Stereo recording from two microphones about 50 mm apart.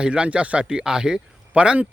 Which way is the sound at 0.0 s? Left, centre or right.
Right.